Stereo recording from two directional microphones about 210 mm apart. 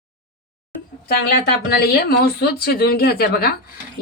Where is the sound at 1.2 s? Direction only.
50° left (ahead or behind).